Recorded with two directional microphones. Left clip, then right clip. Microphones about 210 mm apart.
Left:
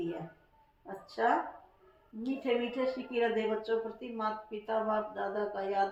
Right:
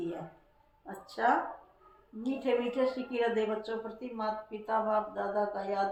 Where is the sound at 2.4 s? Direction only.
20° right (ahead or behind).